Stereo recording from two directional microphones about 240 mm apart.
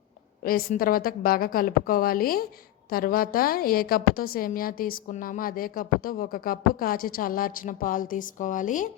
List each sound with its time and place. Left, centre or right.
0.4 s a woman's voice: left